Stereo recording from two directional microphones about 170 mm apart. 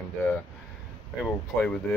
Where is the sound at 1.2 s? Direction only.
5° left (ahead or behind).